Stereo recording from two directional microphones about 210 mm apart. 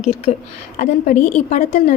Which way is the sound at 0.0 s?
30° left (ahead or behind).